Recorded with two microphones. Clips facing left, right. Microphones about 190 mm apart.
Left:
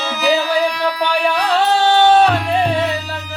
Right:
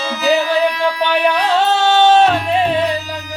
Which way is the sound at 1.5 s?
20° right (ahead or behind).